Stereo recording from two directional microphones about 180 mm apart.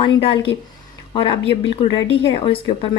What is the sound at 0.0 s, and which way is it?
A woman's voice, 30° left (ahead or behind).